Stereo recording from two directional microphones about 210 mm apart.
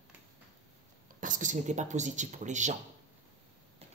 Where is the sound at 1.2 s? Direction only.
35° right (ahead or behind).